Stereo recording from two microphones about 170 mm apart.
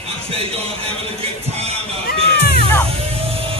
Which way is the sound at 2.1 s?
70° left (ahead or behind).